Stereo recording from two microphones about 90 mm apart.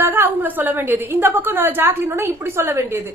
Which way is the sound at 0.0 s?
20° right (ahead or behind).